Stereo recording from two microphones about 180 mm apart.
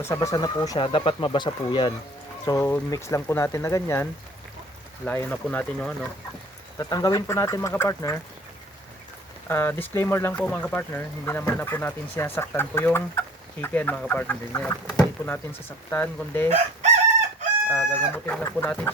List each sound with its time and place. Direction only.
0.0 s speech: 15° left (ahead or behind)
6.7 s speech: 20° left (ahead or behind)
9.5 s speech: 10° left (ahead or behind)
16.5 s chicken: 40° right (ahead or behind)
17.9 s speech: 5° left (ahead or behind)